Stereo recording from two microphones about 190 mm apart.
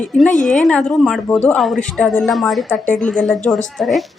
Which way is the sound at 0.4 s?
5° left (ahead or behind).